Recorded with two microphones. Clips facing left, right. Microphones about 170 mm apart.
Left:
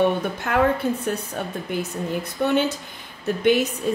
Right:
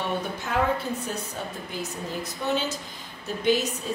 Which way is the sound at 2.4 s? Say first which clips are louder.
Left 6 dB; 60° left (ahead or behind).